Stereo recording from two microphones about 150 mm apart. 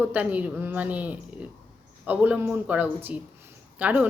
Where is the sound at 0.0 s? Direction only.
10° right (ahead or behind).